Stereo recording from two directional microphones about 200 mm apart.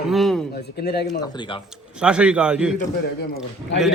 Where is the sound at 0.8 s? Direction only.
55° left (ahead or behind).